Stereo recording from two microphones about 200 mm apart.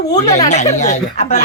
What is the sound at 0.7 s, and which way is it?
Speech, 35° left (ahead or behind).